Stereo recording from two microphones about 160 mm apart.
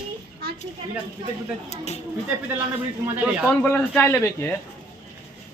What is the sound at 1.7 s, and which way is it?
Speech, 45° left (ahead or behind).